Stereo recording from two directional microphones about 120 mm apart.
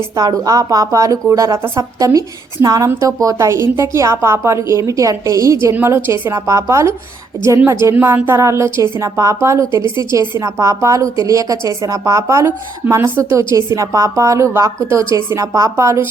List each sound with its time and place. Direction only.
0.2 s a woman's voice: 30° right (ahead or behind)
9.8 s a woman's voice: 40° left (ahead or behind)
10.1 s a woman's voice: 25° right (ahead or behind)